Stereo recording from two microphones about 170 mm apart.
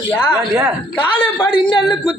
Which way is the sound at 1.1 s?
30° left (ahead or behind).